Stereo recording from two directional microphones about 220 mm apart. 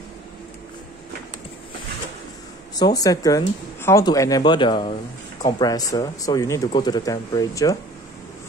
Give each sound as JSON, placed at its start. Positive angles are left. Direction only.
{"t": 2.7, "sound": "speech", "side_deg": 15}